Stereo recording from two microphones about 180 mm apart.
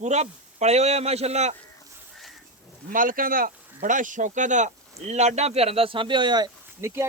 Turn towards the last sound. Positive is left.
turn(degrees=-15)  # may be behind; listen again after turning